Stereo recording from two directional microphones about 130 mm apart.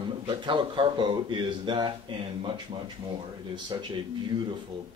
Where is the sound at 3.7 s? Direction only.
35° right (ahead or behind).